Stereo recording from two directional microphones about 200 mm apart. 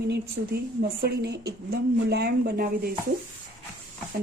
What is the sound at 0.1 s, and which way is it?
Speech, 50° right (ahead or behind).